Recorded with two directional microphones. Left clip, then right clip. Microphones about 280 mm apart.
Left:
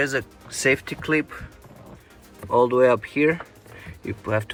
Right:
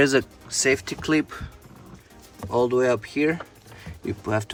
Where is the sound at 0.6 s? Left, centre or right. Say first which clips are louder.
Left 1 dB; centre.